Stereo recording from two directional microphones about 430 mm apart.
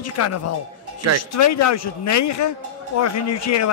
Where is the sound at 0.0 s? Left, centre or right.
Left.